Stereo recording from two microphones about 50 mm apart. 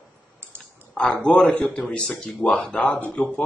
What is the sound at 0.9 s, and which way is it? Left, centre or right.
Speech, left.